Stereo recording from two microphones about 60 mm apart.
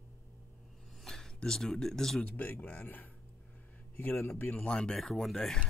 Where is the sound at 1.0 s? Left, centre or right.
Centre.